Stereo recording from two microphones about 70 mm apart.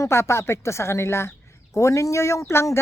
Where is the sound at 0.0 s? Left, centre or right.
Left.